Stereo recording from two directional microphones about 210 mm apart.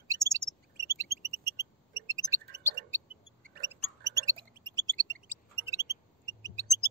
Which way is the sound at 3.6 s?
15° right (ahead or behind).